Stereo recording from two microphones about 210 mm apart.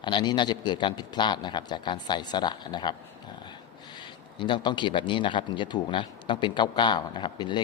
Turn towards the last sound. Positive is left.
turn(degrees=20)  # may be behind; listen again after turning